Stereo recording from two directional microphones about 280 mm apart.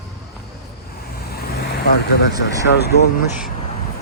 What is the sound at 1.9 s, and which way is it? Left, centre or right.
Speech, left.